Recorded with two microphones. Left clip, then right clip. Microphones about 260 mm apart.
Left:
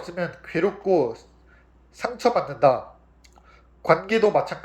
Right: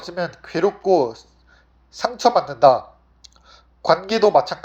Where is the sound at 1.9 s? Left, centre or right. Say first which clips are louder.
Right 5 dB; centre.